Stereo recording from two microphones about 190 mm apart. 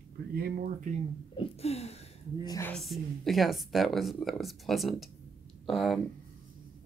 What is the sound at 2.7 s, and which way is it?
Speech, centre (ahead or behind).